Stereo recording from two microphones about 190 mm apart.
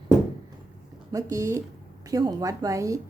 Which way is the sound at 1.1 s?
15° right (ahead or behind).